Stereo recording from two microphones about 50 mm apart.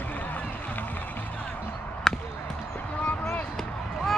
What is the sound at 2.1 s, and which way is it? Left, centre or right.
Basketball bounce, centre.